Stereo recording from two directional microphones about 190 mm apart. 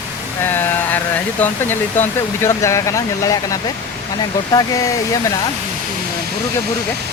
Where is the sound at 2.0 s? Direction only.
15° left (ahead or behind).